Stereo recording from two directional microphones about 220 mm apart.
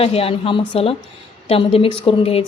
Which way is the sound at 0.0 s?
25° left (ahead or behind).